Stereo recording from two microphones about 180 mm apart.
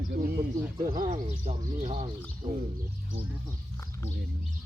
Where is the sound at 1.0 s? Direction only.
35° right (ahead or behind).